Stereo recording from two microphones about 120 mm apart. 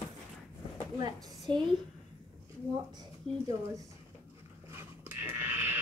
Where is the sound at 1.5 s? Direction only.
40° right (ahead or behind).